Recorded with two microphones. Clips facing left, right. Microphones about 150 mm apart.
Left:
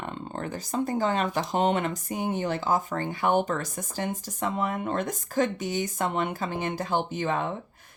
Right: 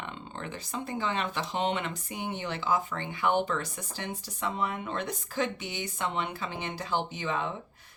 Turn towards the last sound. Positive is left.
turn(degrees=50)  # may be behind; listen again after turning